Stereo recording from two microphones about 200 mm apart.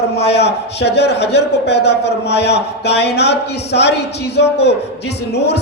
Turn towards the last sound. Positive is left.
turn(degrees=55)  # may be behind; listen again after turning